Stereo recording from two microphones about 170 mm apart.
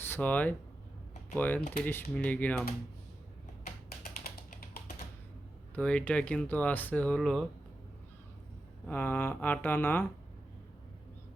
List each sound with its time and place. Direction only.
0.0 s speech: 10° left (ahead or behind)
3.8 s a sound: 60° left (ahead or behind)
5.7 s speech: 5° left (ahead or behind)
8.9 s speech: 10° left (ahead or behind)